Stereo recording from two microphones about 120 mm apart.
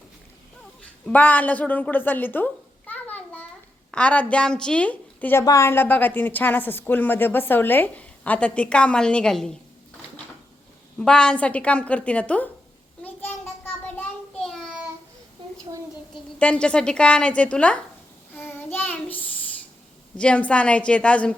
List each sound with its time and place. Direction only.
0.8 s a sound: 10° left (ahead or behind)
3.9 s a woman's voice: 10° left (ahead or behind)
5.4 s a woman's voice: 25° left (ahead or behind); by 9.6 s 5° left (ahead or behind)
10.9 s a woman's voice: 5° left (ahead or behind)
13.0 s child singing: 15° left (ahead or behind)
16.4 s a woman's voice: 10° left (ahead or behind)
18.3 s child singing: 15° left (ahead or behind)
20.1 s a woman's voice: 10° left (ahead or behind)